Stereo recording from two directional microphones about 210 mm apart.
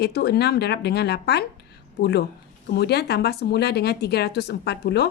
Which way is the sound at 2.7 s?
50° left (ahead or behind).